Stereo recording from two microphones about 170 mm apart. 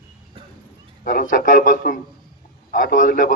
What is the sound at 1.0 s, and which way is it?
A man's voice, 55° left (ahead or behind).